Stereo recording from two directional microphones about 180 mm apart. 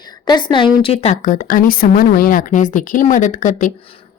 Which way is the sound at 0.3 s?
25° left (ahead or behind).